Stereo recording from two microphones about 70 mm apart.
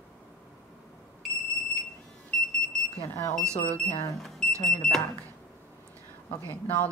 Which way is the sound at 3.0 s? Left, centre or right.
Left.